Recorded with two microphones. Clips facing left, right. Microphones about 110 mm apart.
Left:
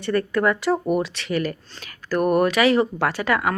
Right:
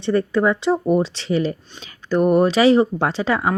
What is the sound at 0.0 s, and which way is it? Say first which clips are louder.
Speech: right 3 dB; 25° right (ahead or behind).